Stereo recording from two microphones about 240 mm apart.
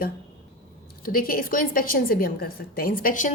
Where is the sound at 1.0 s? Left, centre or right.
Left.